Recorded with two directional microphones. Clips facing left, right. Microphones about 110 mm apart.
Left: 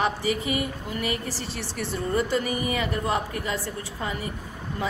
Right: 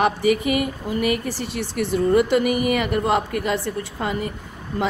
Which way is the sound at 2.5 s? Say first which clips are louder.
Right 7 dB; 65° right (ahead or behind).